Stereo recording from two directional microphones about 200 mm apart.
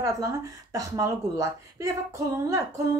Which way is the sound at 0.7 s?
15° right (ahead or behind).